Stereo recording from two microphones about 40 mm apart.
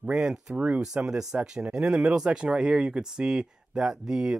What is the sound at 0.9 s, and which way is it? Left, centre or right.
Speech, centre.